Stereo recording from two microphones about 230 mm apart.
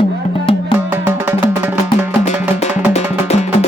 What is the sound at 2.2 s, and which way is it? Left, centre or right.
Music, left.